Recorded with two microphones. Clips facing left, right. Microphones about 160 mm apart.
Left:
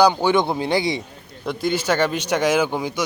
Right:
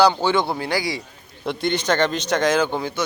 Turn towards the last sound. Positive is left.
turn(degrees=10)  # may be behind; listen again after turning